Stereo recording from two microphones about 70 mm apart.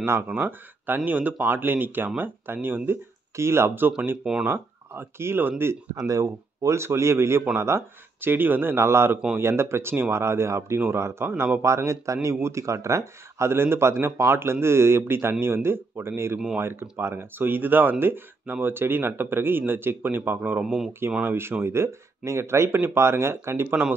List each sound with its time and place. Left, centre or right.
0.0 s speech: right
3.3 s speech: right
4.2 s speech: centre
4.5 s speech: right
5.9 s a man's voice: right
20.6 s speech: centre
21.2 s speech: right